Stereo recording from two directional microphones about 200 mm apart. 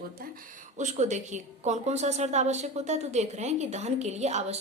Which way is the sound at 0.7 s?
35° right (ahead or behind).